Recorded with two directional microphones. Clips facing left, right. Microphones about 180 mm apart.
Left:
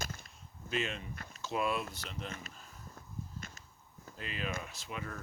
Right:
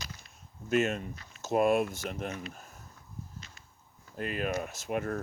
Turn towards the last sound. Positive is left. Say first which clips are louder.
# right 11 dB
turn(degrees=-50)  # may be behind; listen again after turning